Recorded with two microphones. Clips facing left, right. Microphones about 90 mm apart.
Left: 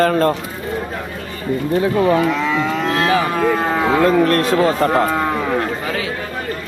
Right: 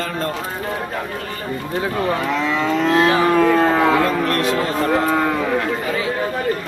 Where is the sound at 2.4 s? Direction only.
Centre (ahead or behind).